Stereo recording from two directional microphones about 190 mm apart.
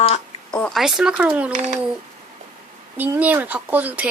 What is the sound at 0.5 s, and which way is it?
Speech, centre (ahead or behind).